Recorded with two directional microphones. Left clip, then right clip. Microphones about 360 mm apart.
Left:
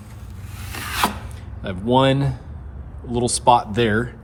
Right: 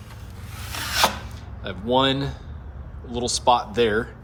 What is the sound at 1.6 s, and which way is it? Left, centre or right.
A man's voice, centre.